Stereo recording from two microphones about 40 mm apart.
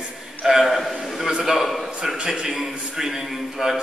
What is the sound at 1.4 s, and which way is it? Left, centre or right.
A man's voice, centre.